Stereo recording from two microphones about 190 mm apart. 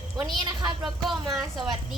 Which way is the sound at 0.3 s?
20° right (ahead or behind).